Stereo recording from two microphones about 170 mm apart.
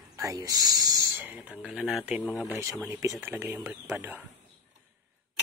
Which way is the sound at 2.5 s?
20° right (ahead or behind).